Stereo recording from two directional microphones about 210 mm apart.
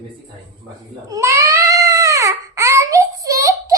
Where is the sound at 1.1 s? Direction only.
15° right (ahead or behind).